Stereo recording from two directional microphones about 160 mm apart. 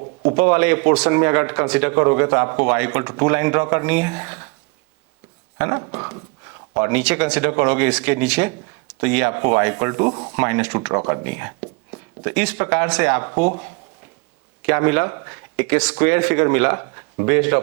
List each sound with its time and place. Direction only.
0.3 s a man's voice: 10° right (ahead or behind)
5.5 s a man's voice: 15° right (ahead or behind)